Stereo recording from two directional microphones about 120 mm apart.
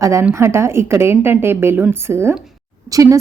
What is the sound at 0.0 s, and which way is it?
A woman's voice, 25° right (ahead or behind).